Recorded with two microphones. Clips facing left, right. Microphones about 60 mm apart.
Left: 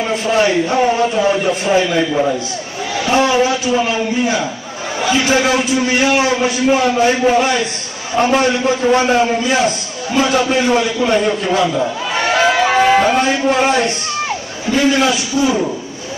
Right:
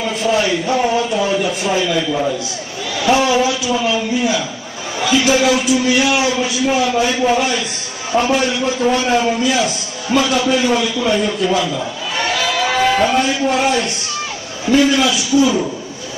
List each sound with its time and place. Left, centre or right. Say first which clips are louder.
0.0 s a man's voice: left 2 dB; left
12.2 s a sound: left 5 dB; left
14.8 s a man's voice: left 2 dB; left